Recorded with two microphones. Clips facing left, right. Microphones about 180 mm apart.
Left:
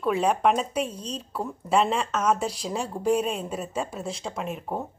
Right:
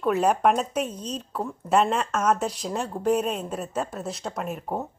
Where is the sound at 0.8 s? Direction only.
30° left (ahead or behind).